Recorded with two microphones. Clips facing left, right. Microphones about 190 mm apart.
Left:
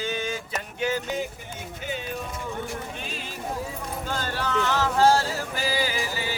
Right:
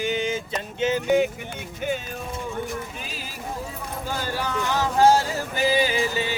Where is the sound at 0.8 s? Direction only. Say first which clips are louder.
Right 4 dB; 20° right (ahead or behind).